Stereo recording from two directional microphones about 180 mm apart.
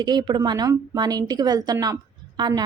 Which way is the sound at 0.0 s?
25° right (ahead or behind).